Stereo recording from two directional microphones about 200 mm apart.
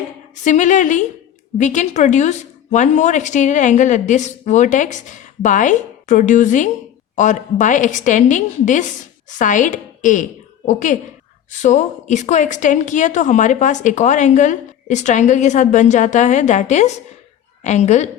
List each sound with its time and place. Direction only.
0.4 s a woman's voice: 35° left (ahead or behind)